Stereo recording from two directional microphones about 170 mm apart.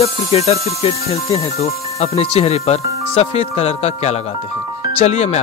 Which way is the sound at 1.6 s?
40° left (ahead or behind).